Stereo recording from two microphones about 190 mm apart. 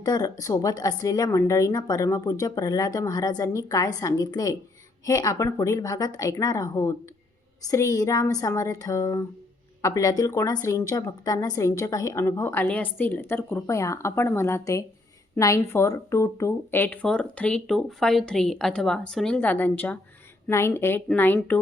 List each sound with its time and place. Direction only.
0.0 s a woman's voice: 20° left (ahead or behind)